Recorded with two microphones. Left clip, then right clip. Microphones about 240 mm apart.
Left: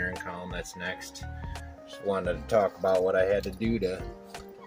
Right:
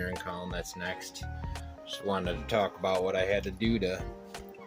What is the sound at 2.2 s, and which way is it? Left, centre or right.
Speech, centre.